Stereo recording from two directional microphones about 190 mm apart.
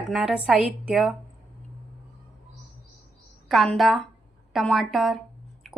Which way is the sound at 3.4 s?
Centre (ahead or behind).